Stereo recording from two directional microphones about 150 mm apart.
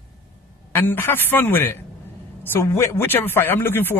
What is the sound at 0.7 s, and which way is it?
Speech, 15° left (ahead or behind).